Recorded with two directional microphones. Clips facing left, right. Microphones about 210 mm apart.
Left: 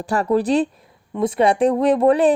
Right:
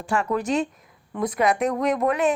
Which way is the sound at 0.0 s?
35° left (ahead or behind).